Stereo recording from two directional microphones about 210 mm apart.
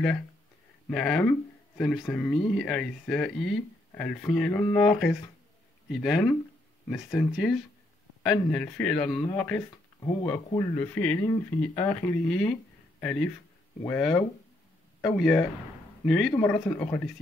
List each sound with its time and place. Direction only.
0.8 s speech: 5° left (ahead or behind)